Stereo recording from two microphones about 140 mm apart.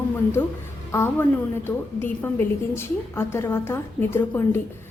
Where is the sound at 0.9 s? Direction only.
15° left (ahead or behind).